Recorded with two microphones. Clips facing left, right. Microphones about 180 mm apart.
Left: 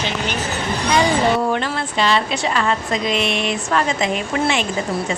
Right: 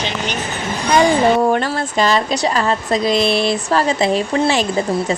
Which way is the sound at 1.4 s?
40° right (ahead or behind).